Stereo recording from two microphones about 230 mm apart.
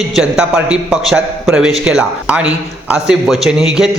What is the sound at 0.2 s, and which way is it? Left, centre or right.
A man's voice, centre.